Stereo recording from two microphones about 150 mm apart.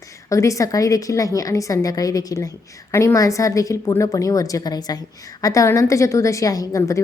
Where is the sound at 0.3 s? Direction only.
20° left (ahead or behind).